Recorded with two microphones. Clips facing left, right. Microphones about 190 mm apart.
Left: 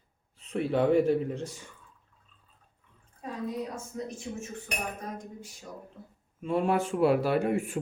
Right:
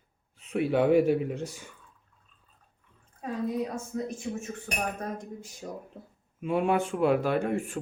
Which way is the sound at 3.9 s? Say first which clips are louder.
Right 4 dB; 65° right (ahead or behind).